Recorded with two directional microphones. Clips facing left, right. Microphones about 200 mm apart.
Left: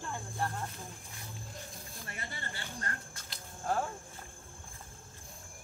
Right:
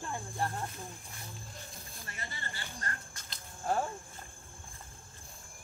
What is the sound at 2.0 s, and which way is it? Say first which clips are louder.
Speech: left 1 dB; 60° left (ahead or behind).